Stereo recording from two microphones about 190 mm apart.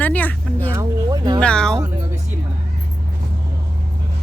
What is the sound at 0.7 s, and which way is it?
Speech, 20° right (ahead or behind).